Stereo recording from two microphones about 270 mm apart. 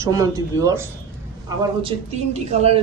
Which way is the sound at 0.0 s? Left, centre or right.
Centre.